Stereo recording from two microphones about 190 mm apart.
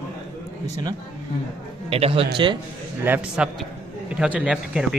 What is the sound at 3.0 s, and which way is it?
A man's voice, 10° right (ahead or behind).